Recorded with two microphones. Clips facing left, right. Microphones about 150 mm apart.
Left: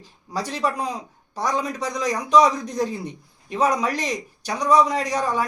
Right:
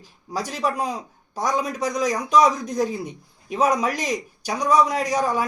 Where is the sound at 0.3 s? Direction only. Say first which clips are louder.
Even; 10° right (ahead or behind).